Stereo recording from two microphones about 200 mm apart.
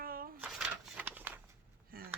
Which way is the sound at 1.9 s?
50° right (ahead or behind).